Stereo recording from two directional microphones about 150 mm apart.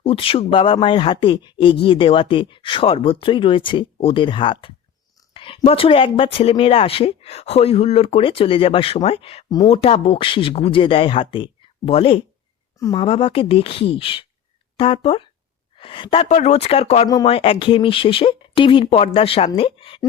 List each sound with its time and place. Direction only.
0.0 s speech: 40° left (ahead or behind)
5.3 s a sound: 35° left (ahead or behind)
5.6 s speech: 40° left (ahead or behind)
16.3 s speech: 50° left (ahead or behind)